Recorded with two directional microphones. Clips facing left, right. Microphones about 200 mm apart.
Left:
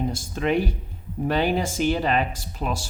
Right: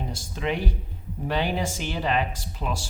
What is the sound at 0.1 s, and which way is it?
Speech, 50° left (ahead or behind).